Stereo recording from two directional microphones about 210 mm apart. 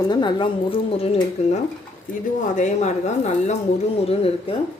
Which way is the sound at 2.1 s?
40° left (ahead or behind).